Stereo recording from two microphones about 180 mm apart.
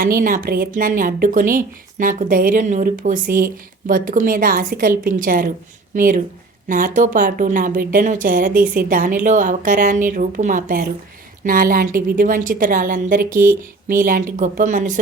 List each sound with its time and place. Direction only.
0.0 s speech: 50° right (ahead or behind)